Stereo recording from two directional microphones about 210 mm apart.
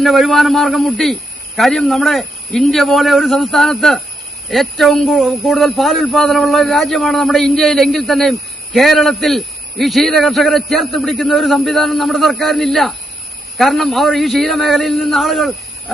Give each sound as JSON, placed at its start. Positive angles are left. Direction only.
{"t": 0.0, "sound": "speech", "side_deg": 0}